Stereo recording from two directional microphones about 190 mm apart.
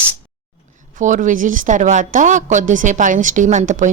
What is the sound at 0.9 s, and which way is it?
A woman's voice, 40° right (ahead or behind).